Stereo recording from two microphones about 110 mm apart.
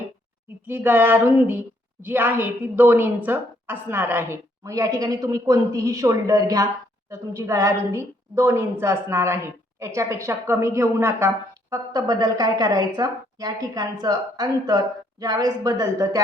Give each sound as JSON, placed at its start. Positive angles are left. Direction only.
{"t": 0.7, "sound": "a woman's voice", "side_deg": -20}
{"t": 11.7, "sound": "speech", "side_deg": -35}